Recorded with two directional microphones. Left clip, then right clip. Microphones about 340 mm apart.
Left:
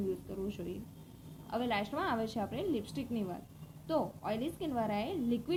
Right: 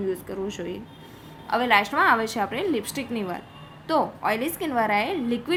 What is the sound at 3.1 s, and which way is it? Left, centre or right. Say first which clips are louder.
Speech: right 9 dB; right.